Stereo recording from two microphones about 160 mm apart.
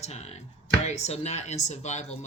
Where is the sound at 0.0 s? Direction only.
45° left (ahead or behind).